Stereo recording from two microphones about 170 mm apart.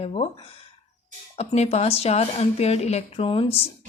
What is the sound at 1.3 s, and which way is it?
Speech, 40° left (ahead or behind).